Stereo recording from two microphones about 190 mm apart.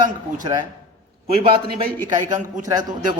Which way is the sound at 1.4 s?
25° right (ahead or behind).